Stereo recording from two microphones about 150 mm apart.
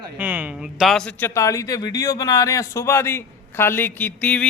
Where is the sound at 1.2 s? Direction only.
20° left (ahead or behind).